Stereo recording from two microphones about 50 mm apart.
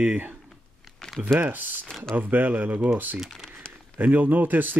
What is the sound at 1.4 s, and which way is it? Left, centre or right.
Speech, right.